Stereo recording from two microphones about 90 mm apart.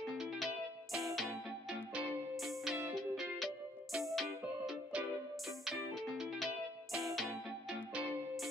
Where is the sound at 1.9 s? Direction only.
20° right (ahead or behind).